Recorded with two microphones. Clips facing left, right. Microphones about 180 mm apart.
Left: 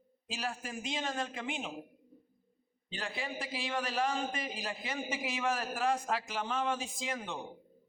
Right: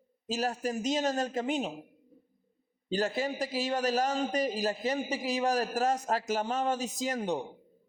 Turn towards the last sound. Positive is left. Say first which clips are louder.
# right 8 dB
turn(degrees=-40)  # may be behind; listen again after turning